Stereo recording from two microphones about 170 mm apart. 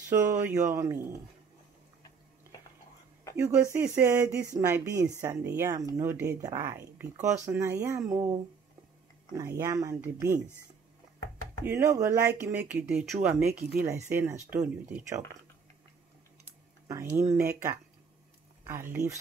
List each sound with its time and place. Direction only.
0.1 s speech: 20° right (ahead or behind)
3.3 s speech: 15° right (ahead or behind)
9.4 s speech: 15° right (ahead or behind)
11.6 s speech: 15° right (ahead or behind)
16.8 s speech: 15° right (ahead or behind)